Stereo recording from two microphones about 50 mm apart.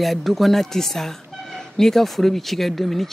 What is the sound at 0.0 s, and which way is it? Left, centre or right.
Speech, centre.